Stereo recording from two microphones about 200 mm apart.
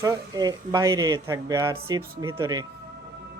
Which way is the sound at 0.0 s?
15° right (ahead or behind).